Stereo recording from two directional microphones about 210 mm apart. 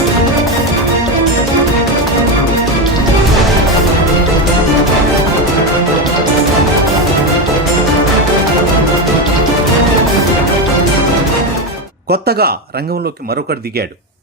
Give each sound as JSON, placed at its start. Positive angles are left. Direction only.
{"t": 12.1, "sound": "speech", "side_deg": -50}